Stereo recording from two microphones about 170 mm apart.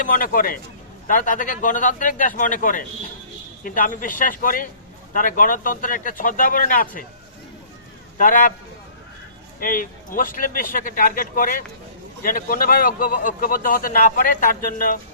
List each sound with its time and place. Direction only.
0.0 s a man's voice: 55° left (ahead or behind)
8.2 s a man's voice: 50° left (ahead or behind)
9.6 s a man's voice: 55° left (ahead or behind)